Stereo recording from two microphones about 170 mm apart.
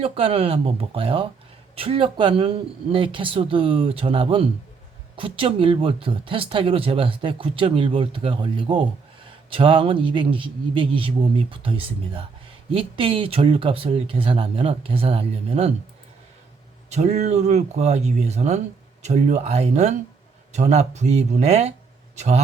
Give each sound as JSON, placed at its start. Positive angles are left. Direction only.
{"t": 0.0, "sound": "speech", "side_deg": -35}
{"t": 12.7, "sound": "speech", "side_deg": -30}
{"t": 16.9, "sound": "speech", "side_deg": -40}